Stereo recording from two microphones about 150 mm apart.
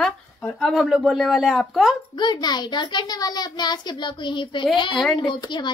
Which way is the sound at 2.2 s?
30° left (ahead or behind).